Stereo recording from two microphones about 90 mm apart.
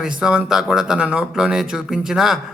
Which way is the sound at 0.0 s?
10° right (ahead or behind).